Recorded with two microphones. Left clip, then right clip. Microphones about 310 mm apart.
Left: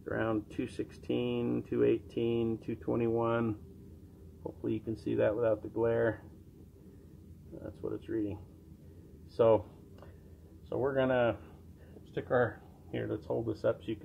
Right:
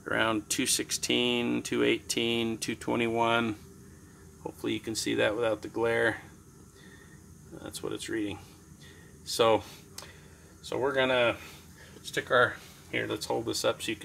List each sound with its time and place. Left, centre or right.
0.0 s speech: right
7.6 s speech: right
9.4 s speech: right